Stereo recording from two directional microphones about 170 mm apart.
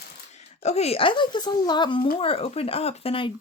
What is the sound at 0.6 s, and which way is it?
Speech, 40° left (ahead or behind).